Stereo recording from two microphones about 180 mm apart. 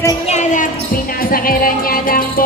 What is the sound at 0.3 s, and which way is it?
Basketball bounce, 40° left (ahead or behind).